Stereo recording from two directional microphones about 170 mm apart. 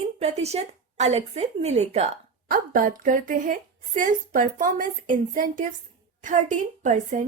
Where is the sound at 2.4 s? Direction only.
55° right (ahead or behind).